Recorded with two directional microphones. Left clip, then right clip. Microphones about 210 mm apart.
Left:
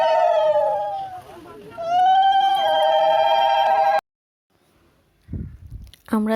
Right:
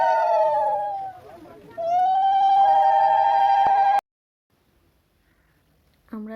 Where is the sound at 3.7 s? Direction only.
Centre (ahead or behind).